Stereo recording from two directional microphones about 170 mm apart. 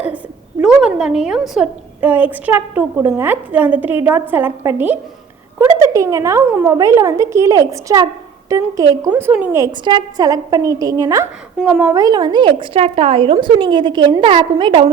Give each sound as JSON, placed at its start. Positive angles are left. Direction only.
{"t": 0.6, "sound": "a woman's voice", "side_deg": -5}
{"t": 9.8, "sound": "a woman's voice", "side_deg": -25}